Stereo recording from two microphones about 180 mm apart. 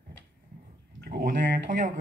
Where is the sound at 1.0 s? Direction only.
60° right (ahead or behind).